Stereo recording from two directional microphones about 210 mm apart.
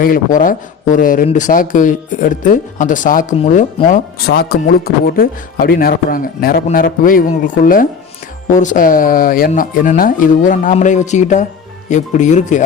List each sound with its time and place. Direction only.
0.0 s speech: 40° left (ahead or behind)